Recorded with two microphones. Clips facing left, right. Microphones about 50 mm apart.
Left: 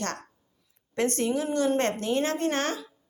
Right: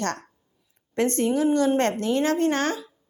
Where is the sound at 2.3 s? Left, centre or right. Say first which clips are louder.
Right 5 dB; right.